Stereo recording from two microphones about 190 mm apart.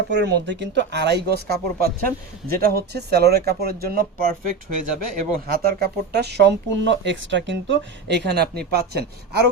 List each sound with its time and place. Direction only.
0.1 s speech: 65° right (ahead or behind)